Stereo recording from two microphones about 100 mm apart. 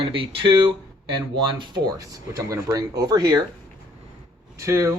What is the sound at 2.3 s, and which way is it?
Speech, 35° right (ahead or behind).